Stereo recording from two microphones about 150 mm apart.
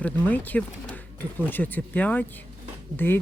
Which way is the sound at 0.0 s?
10° left (ahead or behind).